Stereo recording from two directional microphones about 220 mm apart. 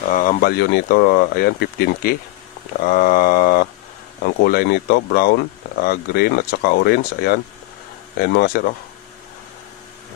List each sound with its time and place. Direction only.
0.1 s speech: 35° left (ahead or behind)